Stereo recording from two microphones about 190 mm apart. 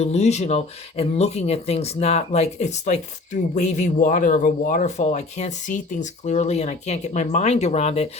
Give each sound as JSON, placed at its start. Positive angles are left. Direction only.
{"t": 0.0, "sound": "speech", "side_deg": 35}